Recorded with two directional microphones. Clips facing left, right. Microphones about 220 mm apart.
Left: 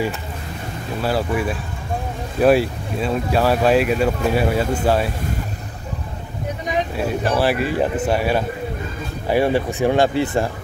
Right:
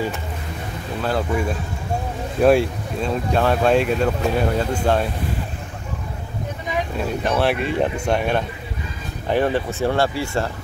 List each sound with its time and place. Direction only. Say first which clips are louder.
1.0 s speech: left 1 dB; 5° left (ahead or behind)
7.2 s speech: left 1 dB; 5° left (ahead or behind)